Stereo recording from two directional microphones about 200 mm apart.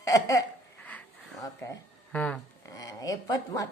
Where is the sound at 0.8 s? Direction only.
5° left (ahead or behind).